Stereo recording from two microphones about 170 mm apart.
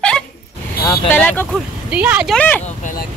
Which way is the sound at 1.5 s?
5° right (ahead or behind).